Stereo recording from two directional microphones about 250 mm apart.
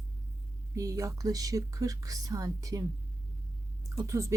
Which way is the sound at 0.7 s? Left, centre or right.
Centre.